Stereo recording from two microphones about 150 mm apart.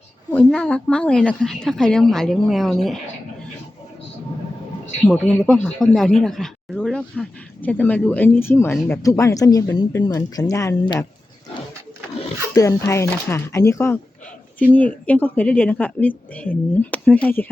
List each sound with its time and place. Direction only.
0.3 s a woman's voice: 5° left (ahead or behind)
5.0 s a woman's voice: 5° left (ahead or behind)
12.5 s speech: 20° left (ahead or behind)